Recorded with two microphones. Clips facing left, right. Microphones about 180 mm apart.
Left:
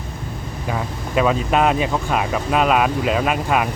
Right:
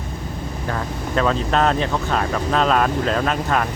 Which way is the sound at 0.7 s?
10° left (ahead or behind).